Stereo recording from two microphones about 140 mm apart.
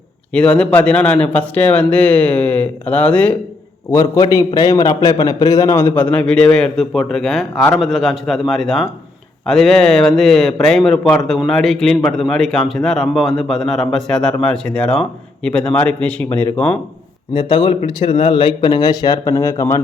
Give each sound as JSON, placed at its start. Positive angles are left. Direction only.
{"t": 0.3, "sound": "a man's voice", "side_deg": 5}
{"t": 4.1, "sound": "a man's voice", "side_deg": 25}
{"t": 17.3, "sound": "speech", "side_deg": 35}